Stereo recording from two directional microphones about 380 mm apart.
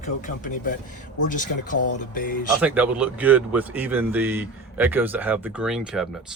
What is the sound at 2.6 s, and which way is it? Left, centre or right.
Speech, centre.